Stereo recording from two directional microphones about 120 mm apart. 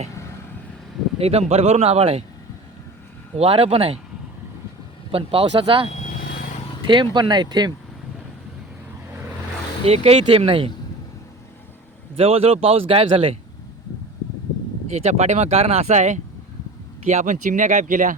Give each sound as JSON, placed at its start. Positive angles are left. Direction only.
{"t": 1.2, "sound": "speech", "side_deg": -60}
{"t": 3.3, "sound": "speech", "side_deg": -55}
{"t": 5.1, "sound": "speech", "side_deg": -50}
{"t": 5.9, "sound": "vehicle", "side_deg": 75}
{"t": 6.8, "sound": "speech", "side_deg": -40}
{"t": 9.8, "sound": "speech", "side_deg": -55}
{"t": 12.1, "sound": "speech", "side_deg": -55}
{"t": 14.8, "sound": "speech", "side_deg": -65}